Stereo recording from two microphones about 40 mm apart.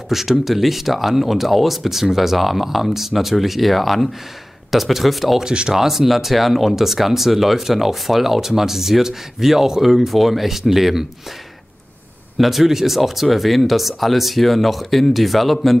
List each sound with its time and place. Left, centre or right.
0.1 s speech: centre
5.4 s speech: centre
5.8 s speech: centre
12.4 s speech: centre